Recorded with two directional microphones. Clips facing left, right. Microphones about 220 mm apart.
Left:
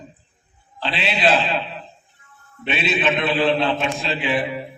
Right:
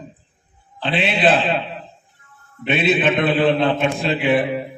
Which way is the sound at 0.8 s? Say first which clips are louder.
Right 3 dB; 50° right (ahead or behind).